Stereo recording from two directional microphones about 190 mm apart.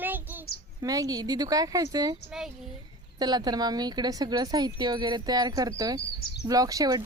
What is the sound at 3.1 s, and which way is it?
Speech, 20° right (ahead or behind).